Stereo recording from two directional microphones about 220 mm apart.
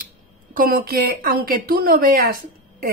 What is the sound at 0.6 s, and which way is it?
Speech, 40° right (ahead or behind).